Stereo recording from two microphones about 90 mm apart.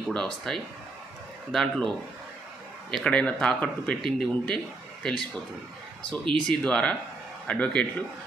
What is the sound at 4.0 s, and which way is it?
Speech, 5° left (ahead or behind).